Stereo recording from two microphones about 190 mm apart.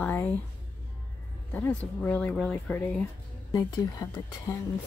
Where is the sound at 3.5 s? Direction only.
20° left (ahead or behind).